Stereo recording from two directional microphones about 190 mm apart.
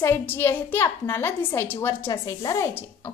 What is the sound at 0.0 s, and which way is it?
A woman's voice, 10° left (ahead or behind).